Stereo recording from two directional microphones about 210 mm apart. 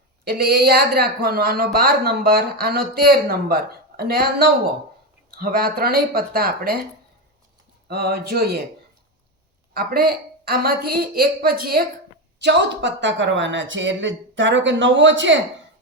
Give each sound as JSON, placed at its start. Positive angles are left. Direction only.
{"t": 0.3, "sound": "speech", "side_deg": -50}
{"t": 7.9, "sound": "speech", "side_deg": -50}
{"t": 9.7, "sound": "speech", "side_deg": -45}
{"t": 12.4, "sound": "speech", "side_deg": -55}